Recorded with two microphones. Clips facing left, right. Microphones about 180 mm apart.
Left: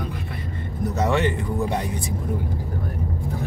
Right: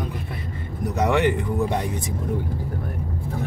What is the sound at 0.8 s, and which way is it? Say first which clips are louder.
Speech: right 1 dB; 15° right (ahead or behind).